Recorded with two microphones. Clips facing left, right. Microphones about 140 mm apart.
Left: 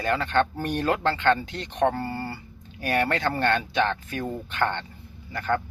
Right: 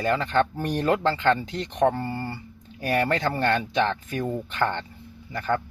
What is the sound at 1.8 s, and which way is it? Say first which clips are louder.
Speech: right 1 dB; centre (ahead or behind).